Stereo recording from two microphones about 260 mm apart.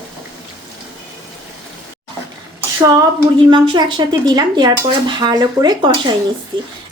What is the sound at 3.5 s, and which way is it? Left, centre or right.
Speech, centre.